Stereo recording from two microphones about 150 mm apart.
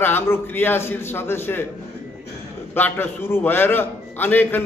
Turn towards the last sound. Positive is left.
turn(degrees=15)  # may be behind; listen again after turning